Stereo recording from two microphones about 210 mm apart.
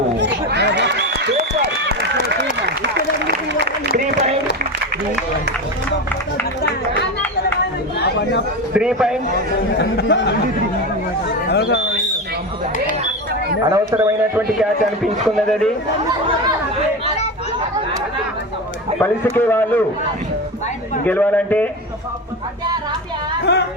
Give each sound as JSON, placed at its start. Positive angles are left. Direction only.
{"t": 0.2, "sound": "chatter", "side_deg": -55}
{"t": 2.6, "sound": "a sound", "side_deg": -55}
{"t": 8.7, "sound": "a man's voice", "side_deg": -5}
{"t": 9.7, "sound": "speech", "side_deg": 55}
{"t": 11.4, "sound": "a sound", "side_deg": 55}
{"t": 13.7, "sound": "a man's voice", "side_deg": -15}
{"t": 18.9, "sound": "a man's voice", "side_deg": 10}
{"t": 21.0, "sound": "a man's voice", "side_deg": 10}
{"t": 23.5, "sound": "speech", "side_deg": 55}